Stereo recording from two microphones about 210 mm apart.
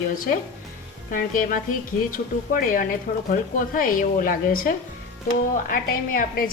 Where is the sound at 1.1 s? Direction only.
40° left (ahead or behind).